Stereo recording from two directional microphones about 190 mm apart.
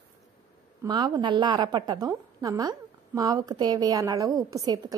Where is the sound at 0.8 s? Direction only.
20° right (ahead or behind).